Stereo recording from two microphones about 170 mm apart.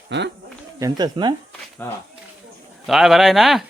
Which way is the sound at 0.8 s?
25° right (ahead or behind).